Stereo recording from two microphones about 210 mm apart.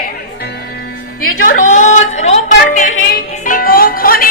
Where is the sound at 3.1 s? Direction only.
40° left (ahead or behind).